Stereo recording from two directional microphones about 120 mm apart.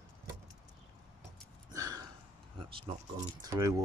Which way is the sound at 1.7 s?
30° right (ahead or behind).